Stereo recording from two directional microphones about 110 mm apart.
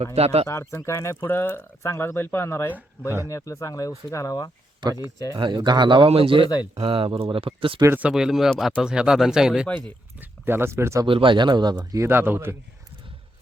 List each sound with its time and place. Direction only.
0.0 s speech: 70° right (ahead or behind)
0.4 s speech: 25° left (ahead or behind)
4.8 s speech: 35° right (ahead or behind)
5.4 s speech: 45° right (ahead or behind)
7.9 s speech: 10° right (ahead or behind)
9.6 s speech: 10° left (ahead or behind)
10.2 s speech: 20° right (ahead or behind)
11.0 s speech: 50° right (ahead or behind)
11.9 s a man's voice: 20° right (ahead or behind)